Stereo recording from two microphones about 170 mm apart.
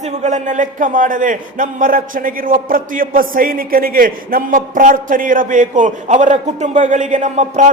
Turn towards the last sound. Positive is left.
turn(degrees=-45)  # may be behind; listen again after turning